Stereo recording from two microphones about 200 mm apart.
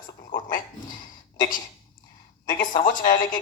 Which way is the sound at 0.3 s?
40° left (ahead or behind).